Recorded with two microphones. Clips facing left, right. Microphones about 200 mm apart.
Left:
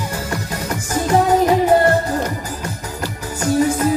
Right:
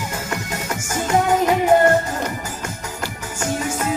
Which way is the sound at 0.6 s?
35° left (ahead or behind).